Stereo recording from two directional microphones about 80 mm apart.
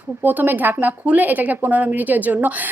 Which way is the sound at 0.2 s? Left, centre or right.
Right.